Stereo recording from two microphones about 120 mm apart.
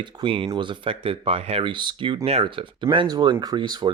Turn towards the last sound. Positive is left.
turn(degrees=-40)  # may be behind; listen again after turning